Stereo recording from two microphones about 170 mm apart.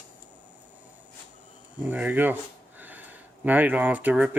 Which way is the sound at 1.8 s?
10° right (ahead or behind).